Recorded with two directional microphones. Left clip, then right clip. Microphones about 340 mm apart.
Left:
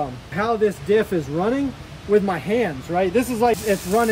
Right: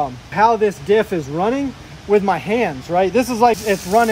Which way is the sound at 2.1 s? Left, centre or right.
Centre.